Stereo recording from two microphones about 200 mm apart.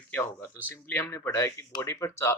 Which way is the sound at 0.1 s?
10° left (ahead or behind).